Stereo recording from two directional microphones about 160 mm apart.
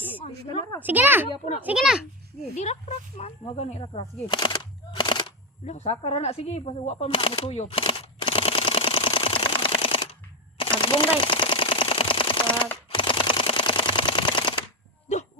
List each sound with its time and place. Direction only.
0.2 s a sound: 30° left (ahead or behind)
0.8 s a child's voice: 10° right (ahead or behind)
2.6 s speech: 45° left (ahead or behind)
5.6 s a sound: 40° left (ahead or behind)
10.6 s typewriter: 30° left (ahead or behind)
12.7 s camera: 30° left (ahead or behind)